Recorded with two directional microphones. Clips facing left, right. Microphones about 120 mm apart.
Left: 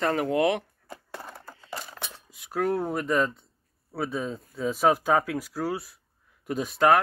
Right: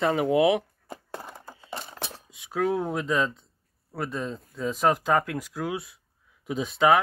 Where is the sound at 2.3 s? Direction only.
Centre (ahead or behind).